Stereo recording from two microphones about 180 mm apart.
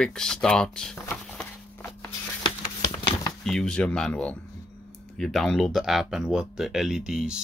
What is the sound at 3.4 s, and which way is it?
Speech, 5° left (ahead or behind).